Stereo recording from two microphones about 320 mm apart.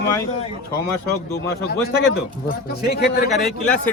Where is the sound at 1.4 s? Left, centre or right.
Left.